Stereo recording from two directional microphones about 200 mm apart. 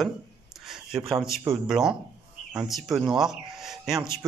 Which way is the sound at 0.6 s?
5° right (ahead or behind).